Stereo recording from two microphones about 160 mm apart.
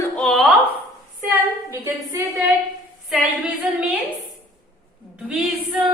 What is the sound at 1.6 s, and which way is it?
Speech, 15° right (ahead or behind).